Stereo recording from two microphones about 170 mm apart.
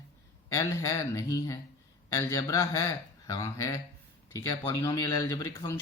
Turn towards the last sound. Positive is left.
turn(degrees=15)  # may be behind; listen again after turning